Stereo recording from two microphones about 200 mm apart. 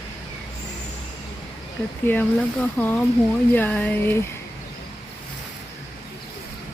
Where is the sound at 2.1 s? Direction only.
10° left (ahead or behind).